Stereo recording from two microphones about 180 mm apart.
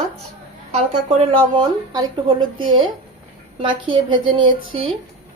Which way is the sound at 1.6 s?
25° right (ahead or behind).